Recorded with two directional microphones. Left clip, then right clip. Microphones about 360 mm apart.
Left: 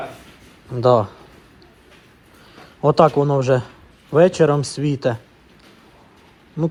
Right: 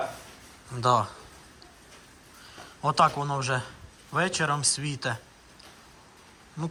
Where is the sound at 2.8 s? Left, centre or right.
Centre.